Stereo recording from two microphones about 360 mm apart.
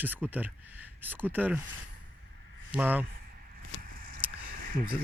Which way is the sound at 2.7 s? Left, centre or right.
Centre.